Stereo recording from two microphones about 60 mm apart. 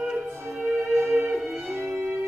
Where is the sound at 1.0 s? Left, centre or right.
Right.